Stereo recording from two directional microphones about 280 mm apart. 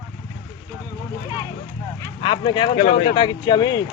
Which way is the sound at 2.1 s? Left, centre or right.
Centre.